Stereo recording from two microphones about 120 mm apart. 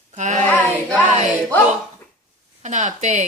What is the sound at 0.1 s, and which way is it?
Child singing, 85° right.